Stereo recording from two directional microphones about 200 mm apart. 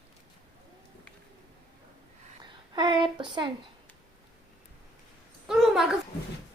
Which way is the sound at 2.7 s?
25° right (ahead or behind).